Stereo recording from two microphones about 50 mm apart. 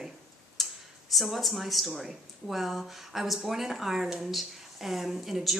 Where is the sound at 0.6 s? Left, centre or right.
Centre.